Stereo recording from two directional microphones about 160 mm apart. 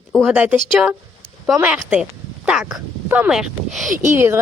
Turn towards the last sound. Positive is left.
turn(degrees=-15)  # may be behind; listen again after turning